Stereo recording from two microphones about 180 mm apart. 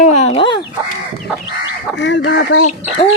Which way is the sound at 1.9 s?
80° left.